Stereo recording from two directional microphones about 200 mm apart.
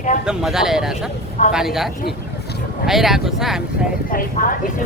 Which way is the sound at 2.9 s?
Centre (ahead or behind).